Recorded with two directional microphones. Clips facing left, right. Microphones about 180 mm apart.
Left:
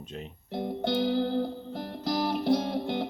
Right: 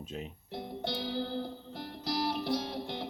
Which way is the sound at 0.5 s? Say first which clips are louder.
Left 9 dB; 55° left (ahead or behind).